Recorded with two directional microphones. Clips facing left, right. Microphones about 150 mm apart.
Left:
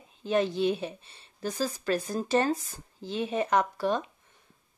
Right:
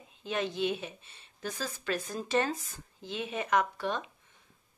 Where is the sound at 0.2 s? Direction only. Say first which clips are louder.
Left 6 dB; 35° left (ahead or behind).